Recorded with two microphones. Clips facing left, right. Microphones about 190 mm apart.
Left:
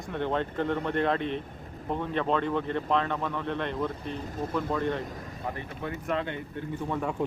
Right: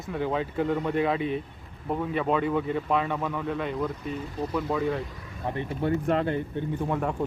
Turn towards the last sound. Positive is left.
turn(degrees=-5)  # may be behind; listen again after turning